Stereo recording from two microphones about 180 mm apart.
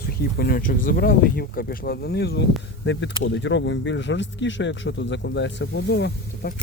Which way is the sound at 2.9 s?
85° left.